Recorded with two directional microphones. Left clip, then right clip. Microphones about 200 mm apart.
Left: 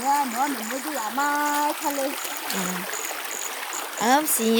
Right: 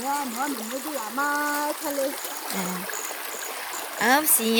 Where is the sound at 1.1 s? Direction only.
35° left (ahead or behind).